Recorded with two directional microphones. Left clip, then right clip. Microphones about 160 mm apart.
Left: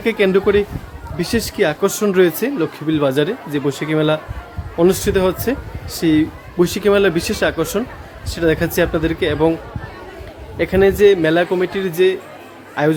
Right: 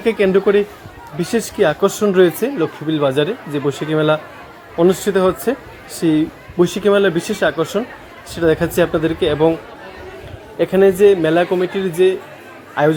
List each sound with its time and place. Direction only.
0.0 s speech: 15° left (ahead or behind)
10.6 s speech: 15° left (ahead or behind)